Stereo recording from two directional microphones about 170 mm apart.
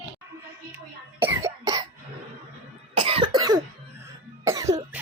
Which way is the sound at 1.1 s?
10° right (ahead or behind).